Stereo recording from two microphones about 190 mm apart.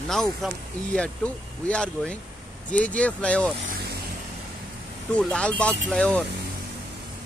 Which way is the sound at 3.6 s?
50° right (ahead or behind).